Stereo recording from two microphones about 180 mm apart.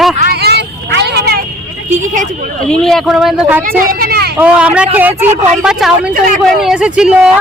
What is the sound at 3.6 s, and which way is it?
Vehicle, 50° right (ahead or behind).